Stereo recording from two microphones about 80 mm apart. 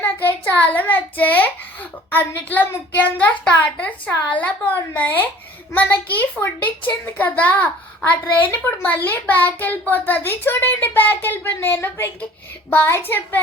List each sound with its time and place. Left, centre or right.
0.0 s a child's voice: left